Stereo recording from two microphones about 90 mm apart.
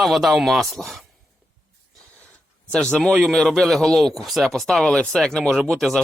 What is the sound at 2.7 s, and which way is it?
A man's voice, 5° left (ahead or behind).